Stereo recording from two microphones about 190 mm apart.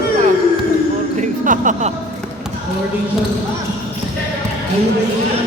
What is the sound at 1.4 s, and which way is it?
Speech, 40° right (ahead or behind).